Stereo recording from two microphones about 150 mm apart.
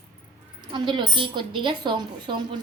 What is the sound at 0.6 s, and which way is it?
A woman's voice, 30° right (ahead or behind).